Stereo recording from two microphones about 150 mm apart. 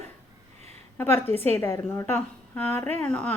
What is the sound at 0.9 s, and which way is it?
A woman's voice, 15° left (ahead or behind).